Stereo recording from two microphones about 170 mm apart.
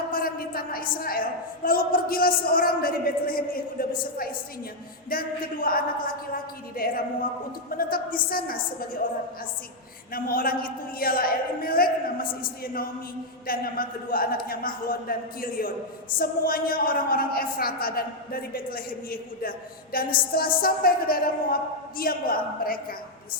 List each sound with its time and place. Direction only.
0.1 s a sound: 60° left (ahead or behind)
1.0 s a man's voice: 60° left (ahead or behind)
10.1 s a man's voice: 55° left (ahead or behind)